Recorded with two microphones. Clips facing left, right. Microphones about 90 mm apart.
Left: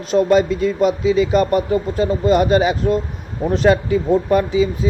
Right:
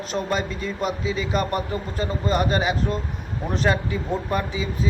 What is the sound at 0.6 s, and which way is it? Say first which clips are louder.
Speech: left 10 dB; 35° right (ahead or behind).